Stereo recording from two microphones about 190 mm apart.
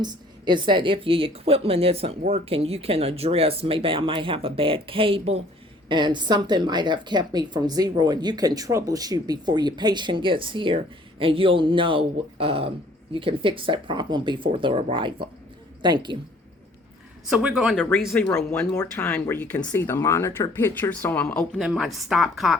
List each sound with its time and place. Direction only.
0.0 s a woman's voice: 20° right (ahead or behind)
17.2 s a woman's voice: 5° right (ahead or behind)
21.6 s a woman's voice: centre (ahead or behind)